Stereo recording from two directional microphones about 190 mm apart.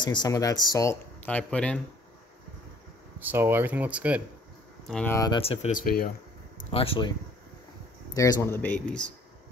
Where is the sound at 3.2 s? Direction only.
10° right (ahead or behind).